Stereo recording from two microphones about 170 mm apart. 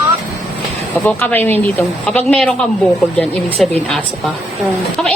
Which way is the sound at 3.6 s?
Centre (ahead or behind).